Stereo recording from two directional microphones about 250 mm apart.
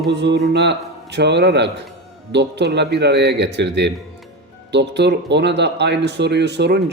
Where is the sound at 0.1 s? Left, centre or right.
Right.